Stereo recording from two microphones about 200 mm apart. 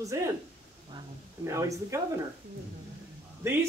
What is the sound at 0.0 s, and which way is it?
Speech, 15° right (ahead or behind).